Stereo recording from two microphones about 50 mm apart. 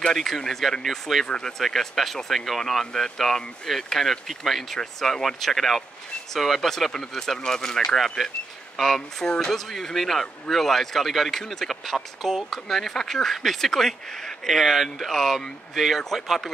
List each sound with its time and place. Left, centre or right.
0.1 s speech: centre
1.2 s speech: centre
1.6 s speech: centre